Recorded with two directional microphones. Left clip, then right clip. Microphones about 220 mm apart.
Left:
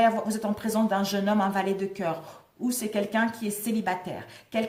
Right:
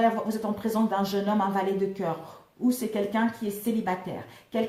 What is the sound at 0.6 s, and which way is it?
A woman's voice, 45° left (ahead or behind).